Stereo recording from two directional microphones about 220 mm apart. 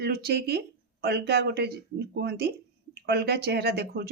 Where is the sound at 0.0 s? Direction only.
45° right (ahead or behind).